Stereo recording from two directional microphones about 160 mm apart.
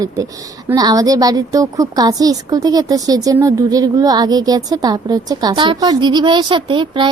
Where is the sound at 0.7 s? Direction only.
25° right (ahead or behind).